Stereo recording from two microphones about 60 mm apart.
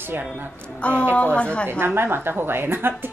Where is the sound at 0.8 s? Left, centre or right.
Left.